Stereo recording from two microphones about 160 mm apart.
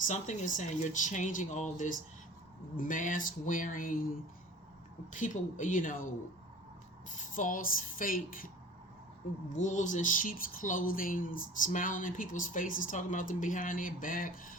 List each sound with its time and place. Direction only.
0.1 s speech: 50° left (ahead or behind)
2.7 s speech: 55° left (ahead or behind)
5.1 s speech: 55° left (ahead or behind)
7.1 s speech: 55° left (ahead or behind)
9.5 s speech: 50° left (ahead or behind)